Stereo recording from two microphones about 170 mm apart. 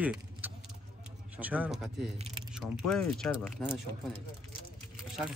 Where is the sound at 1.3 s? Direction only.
10° right (ahead or behind).